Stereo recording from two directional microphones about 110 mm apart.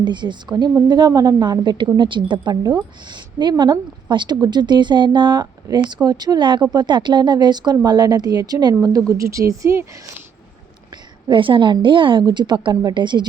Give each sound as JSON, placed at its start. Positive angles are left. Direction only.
{"t": 0.0, "sound": "a woman's voice", "side_deg": -45}
{"t": 10.9, "sound": "a woman's voice", "side_deg": -45}